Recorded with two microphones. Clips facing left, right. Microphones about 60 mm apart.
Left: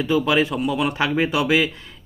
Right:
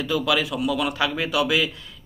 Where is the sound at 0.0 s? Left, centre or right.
Left.